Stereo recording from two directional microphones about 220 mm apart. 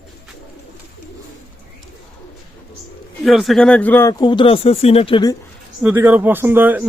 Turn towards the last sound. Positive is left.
turn(degrees=-10)  # may be behind; listen again after turning